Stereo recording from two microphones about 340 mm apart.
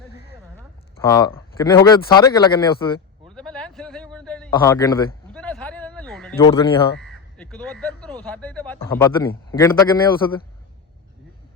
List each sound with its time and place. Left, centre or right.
1.0 s speech: centre
3.3 s a sound: centre
6.5 s speech: centre
7.0 s crow: centre
8.2 s speech: centre